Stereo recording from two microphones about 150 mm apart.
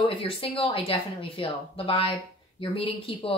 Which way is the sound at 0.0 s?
35° left (ahead or behind).